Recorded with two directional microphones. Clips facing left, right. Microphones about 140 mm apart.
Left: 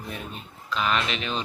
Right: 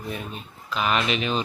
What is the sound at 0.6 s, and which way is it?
Speech, 10° right (ahead or behind).